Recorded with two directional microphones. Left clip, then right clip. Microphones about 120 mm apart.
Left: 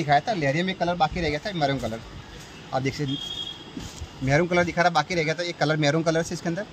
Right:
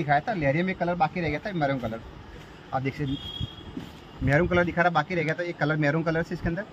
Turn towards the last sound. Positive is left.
turn(degrees=35)  # may be behind; listen again after turning